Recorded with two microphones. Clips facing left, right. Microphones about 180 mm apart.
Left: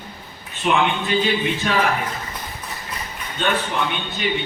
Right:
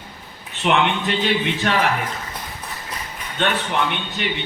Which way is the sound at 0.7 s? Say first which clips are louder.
Even; 70° right (ahead or behind).